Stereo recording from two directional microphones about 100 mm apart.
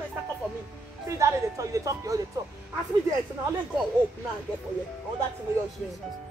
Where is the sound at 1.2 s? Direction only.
30° right (ahead or behind).